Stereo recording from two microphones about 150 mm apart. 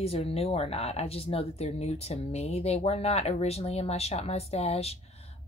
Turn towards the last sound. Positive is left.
turn(degrees=40)  # may be behind; listen again after turning